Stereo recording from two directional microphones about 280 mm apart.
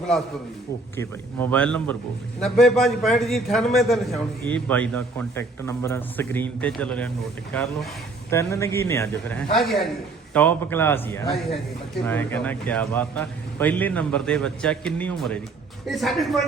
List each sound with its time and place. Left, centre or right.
0.9 s a man's voice: centre